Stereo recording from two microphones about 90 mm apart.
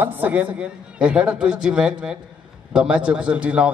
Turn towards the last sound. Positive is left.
turn(degrees=-15)  # may be behind; listen again after turning